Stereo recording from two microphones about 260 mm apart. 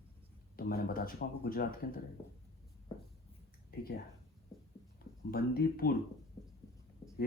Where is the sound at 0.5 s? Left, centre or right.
Left.